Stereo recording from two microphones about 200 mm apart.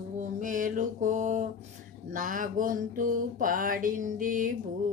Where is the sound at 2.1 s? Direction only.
40° right (ahead or behind).